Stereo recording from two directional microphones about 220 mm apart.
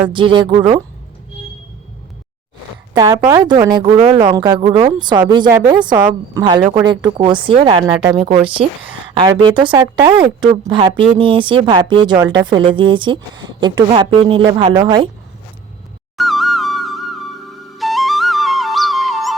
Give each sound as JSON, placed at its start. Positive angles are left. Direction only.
{"t": 0.1, "sound": "speech", "side_deg": -20}
{"t": 2.9, "sound": "speech", "side_deg": -15}
{"t": 16.1, "sound": "music", "side_deg": 0}